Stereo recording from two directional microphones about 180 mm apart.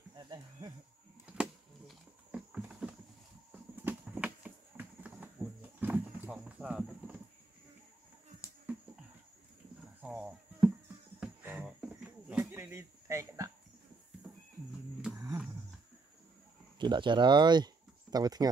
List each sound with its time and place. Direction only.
0.1 s cricket: 20° right (ahead or behind)
1.2 s a sound: 5° right (ahead or behind)
3.7 s horse: 10° right (ahead or behind)
10.0 s music: 5° right (ahead or behind)
11.1 s a sound: 5° right (ahead or behind)
16.7 s speech: 25° right (ahead or behind)